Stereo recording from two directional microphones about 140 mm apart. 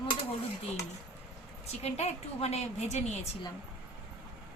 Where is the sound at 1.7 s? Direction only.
50° left (ahead or behind).